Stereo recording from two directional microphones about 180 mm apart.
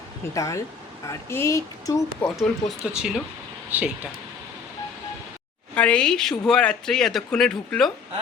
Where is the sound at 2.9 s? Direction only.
5° right (ahead or behind).